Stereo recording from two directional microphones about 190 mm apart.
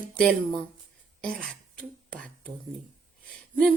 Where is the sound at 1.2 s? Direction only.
5° left (ahead or behind).